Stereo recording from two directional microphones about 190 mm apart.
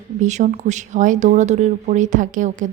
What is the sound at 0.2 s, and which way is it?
A woman's voice, 40° right (ahead or behind).